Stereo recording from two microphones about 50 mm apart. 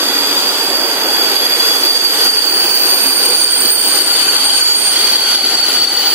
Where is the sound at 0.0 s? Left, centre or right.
Right.